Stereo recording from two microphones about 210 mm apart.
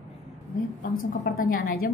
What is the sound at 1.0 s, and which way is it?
Speech, 45° left (ahead or behind).